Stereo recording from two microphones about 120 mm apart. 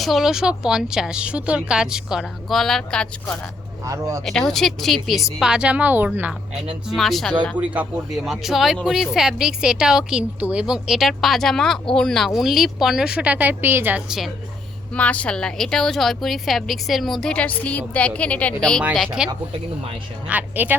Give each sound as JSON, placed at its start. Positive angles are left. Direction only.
{"t": 0.0, "sound": "speech", "side_deg": 0}
{"t": 3.8, "sound": "speech", "side_deg": -30}
{"t": 4.3, "sound": "a woman's voice", "side_deg": 0}
{"t": 6.8, "sound": "speech", "side_deg": 0}
{"t": 7.5, "sound": "a woman's voice", "side_deg": -10}
{"t": 8.1, "sound": "speech", "side_deg": 0}
{"t": 14.9, "sound": "a woman's voice", "side_deg": 10}
{"t": 18.9, "sound": "speech", "side_deg": 0}
{"t": 20.2, "sound": "a woman's voice", "side_deg": -15}